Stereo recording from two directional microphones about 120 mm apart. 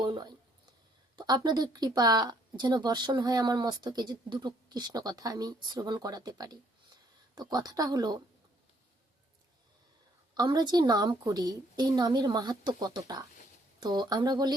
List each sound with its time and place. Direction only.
0.0 s speech: 35° right (ahead or behind)
10.3 s speech: 35° right (ahead or behind)